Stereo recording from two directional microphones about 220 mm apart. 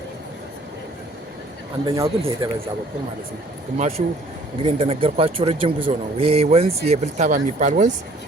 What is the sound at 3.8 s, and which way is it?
Speech, 30° right (ahead or behind).